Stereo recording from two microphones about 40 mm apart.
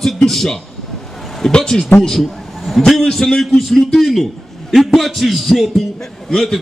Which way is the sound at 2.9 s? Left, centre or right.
Centre.